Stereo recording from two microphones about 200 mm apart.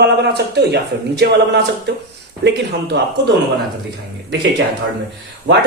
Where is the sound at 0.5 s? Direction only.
55° right (ahead or behind).